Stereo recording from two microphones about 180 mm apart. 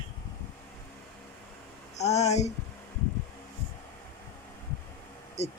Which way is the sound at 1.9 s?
40° left (ahead or behind).